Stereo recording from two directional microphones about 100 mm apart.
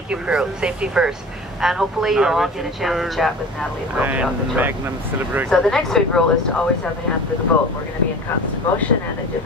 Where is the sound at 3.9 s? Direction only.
15° right (ahead or behind).